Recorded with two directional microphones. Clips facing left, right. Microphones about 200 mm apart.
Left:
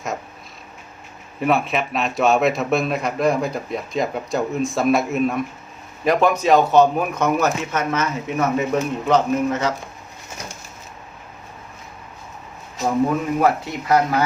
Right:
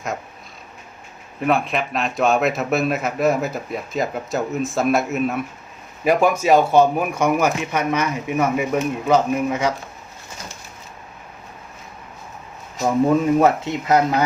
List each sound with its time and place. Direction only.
1.4 s a man's voice: centre (ahead or behind)
13.1 s speech: 25° right (ahead or behind)